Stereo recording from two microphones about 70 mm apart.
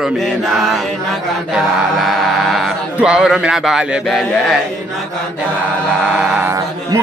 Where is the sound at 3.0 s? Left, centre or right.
Centre.